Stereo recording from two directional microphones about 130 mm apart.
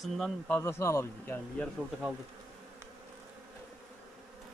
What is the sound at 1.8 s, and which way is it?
Speech, centre (ahead or behind).